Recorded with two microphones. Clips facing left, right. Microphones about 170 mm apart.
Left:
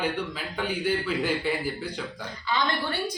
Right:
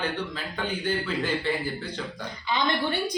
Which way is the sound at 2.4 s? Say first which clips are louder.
Right 1 dB; 15° right (ahead or behind).